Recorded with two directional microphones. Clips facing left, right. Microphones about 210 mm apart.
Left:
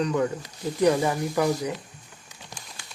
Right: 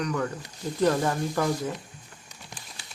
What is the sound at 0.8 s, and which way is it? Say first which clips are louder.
Speech: left 2 dB; 10° left (ahead or behind).